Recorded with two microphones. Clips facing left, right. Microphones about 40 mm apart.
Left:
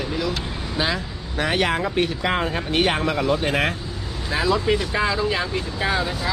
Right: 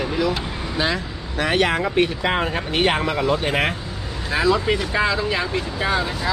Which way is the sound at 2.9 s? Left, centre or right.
Centre.